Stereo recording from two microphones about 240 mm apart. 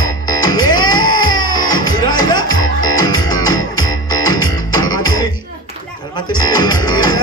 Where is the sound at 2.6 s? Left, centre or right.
Left.